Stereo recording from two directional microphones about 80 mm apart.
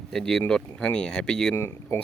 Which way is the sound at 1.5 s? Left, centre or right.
Left.